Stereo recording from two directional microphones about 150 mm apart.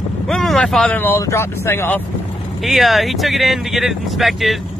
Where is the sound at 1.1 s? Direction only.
15° left (ahead or behind).